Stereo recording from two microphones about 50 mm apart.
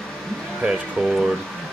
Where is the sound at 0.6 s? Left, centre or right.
Centre.